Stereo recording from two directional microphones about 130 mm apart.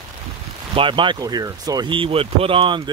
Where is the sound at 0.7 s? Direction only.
40° right (ahead or behind).